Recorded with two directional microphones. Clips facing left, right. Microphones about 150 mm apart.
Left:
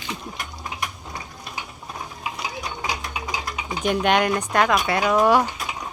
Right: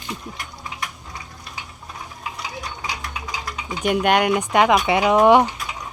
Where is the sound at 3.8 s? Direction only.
10° right (ahead or behind).